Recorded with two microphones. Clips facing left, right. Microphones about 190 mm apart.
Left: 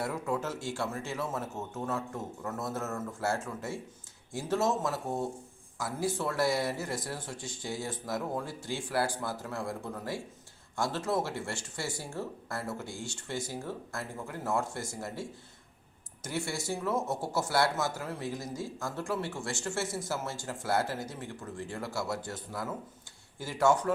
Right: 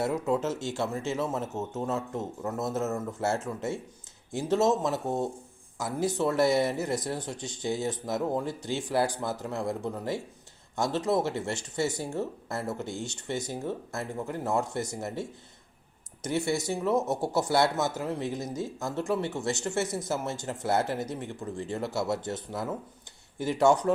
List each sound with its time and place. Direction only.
0.0 s speech: 20° right (ahead or behind)
23.4 s speech: 20° right (ahead or behind)